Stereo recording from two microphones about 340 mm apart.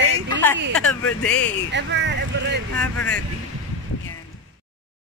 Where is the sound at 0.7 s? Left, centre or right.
Centre.